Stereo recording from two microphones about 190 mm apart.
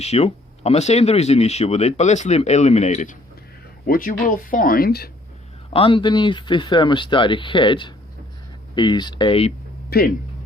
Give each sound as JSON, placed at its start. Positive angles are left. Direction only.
{"t": 0.0, "sound": "speech", "side_deg": 35}
{"t": 5.7, "sound": "speech", "side_deg": 30}
{"t": 9.9, "sound": "speech", "side_deg": 55}